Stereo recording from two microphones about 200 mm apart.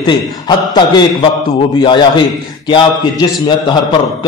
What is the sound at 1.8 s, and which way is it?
A man's voice, 25° left (ahead or behind).